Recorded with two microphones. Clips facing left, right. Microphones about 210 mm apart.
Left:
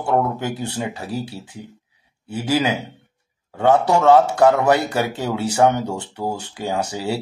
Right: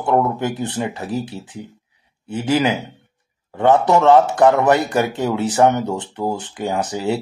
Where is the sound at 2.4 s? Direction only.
10° left (ahead or behind).